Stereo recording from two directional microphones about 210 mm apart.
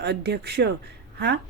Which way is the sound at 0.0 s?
50° right (ahead or behind).